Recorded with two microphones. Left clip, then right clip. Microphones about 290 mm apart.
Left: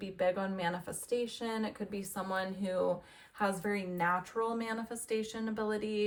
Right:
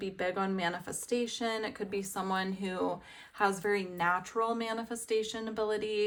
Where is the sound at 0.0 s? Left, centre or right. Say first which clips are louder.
Even; right.